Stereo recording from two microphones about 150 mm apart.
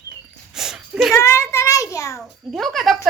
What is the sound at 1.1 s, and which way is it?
A child's voice, 20° left (ahead or behind).